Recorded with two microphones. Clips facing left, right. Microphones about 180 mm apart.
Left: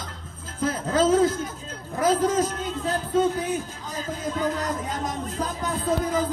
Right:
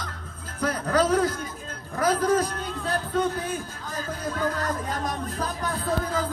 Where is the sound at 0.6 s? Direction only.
25° left (ahead or behind).